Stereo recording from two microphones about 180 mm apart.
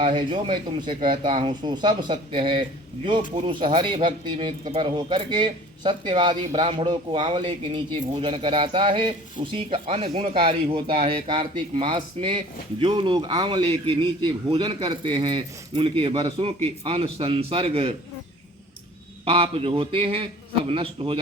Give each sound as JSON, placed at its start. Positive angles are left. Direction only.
{"t": 0.0, "sound": "a man's voice", "side_deg": -25}
{"t": 19.2, "sound": "a man's voice", "side_deg": -30}